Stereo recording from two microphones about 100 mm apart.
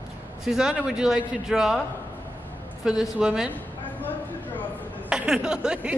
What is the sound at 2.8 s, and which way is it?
Speech, 5° right (ahead or behind).